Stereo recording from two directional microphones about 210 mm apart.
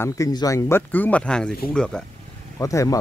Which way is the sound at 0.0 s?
15° left (ahead or behind).